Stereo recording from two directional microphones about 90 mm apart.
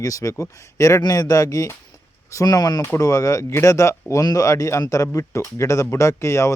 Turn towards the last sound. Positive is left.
turn(degrees=35)  # may be behind; listen again after turning